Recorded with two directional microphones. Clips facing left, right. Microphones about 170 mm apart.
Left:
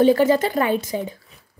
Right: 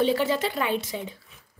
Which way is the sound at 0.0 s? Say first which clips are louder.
Left 8 dB; 45° left (ahead or behind).